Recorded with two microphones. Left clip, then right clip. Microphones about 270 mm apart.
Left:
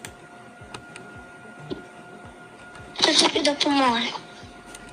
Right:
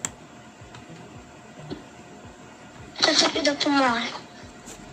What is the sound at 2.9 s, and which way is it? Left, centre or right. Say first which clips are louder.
Speech: left 1 dB; centre.